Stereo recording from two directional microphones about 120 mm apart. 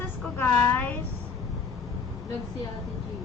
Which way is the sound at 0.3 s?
15° left (ahead or behind).